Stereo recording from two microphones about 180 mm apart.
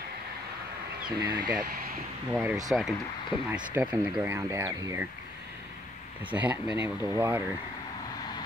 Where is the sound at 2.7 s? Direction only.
5° right (ahead or behind).